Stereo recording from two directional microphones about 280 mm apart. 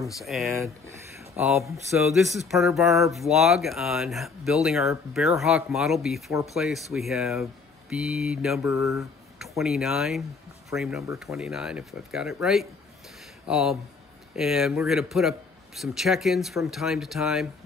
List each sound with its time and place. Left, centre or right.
0.2 s speech: centre